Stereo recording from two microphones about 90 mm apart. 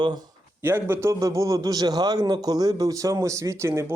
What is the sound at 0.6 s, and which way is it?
Speech, 30° right (ahead or behind).